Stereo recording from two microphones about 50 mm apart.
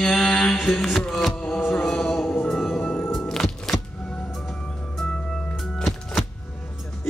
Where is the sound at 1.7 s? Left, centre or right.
Centre.